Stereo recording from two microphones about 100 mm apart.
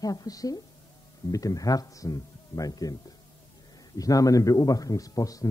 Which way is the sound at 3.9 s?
35° left (ahead or behind).